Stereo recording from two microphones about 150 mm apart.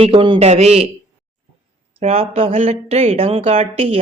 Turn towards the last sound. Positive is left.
turn(degrees=-40)  # may be behind; listen again after turning